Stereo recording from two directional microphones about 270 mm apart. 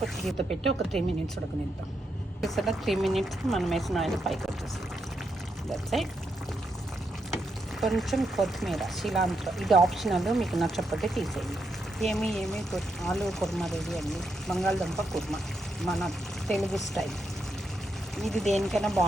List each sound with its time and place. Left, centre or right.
0.0 s speech: centre
2.4 s speech: centre
5.7 s speech: centre
7.8 s speech: centre
18.2 s speech: centre